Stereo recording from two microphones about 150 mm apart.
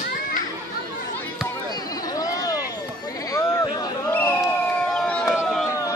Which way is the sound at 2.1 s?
25° left (ahead or behind).